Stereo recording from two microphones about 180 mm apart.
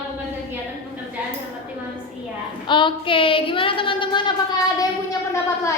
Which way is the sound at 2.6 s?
25° left (ahead or behind).